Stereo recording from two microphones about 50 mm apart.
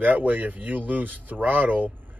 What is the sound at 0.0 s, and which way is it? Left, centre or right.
Speech, right.